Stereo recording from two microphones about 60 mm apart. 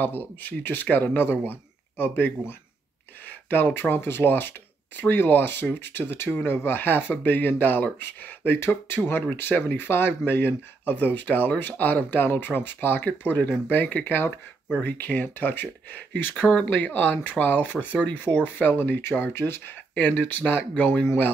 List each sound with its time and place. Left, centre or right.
0.0 s speech: left
8.5 s speech: left
20.2 s speech: left